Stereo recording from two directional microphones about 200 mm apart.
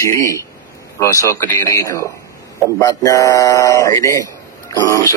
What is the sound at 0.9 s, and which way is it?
Speech, 15° left (ahead or behind).